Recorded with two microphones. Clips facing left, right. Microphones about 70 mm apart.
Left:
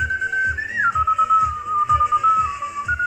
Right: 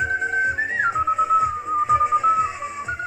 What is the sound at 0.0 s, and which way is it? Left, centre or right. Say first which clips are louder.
Whistling: even; right.